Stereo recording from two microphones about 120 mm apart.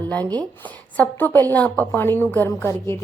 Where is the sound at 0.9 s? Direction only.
15° left (ahead or behind).